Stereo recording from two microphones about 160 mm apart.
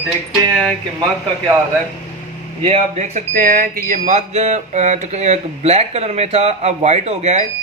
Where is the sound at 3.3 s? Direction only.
65° right (ahead or behind).